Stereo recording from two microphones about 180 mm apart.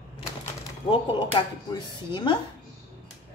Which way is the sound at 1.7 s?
25° left (ahead or behind).